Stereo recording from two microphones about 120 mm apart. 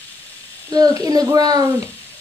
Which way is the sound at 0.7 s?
30° right (ahead or behind).